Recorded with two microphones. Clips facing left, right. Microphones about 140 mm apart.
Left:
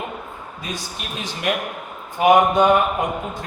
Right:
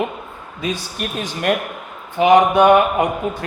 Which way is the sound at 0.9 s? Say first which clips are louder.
Right 5 dB; 45° right (ahead or behind).